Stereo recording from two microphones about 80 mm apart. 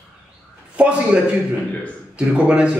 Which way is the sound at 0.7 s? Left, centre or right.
Centre.